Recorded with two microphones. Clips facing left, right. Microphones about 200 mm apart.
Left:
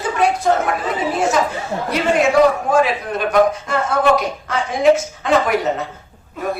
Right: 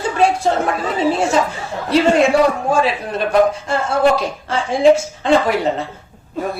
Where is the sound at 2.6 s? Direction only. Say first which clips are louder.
Left 1 dB; 30° right (ahead or behind).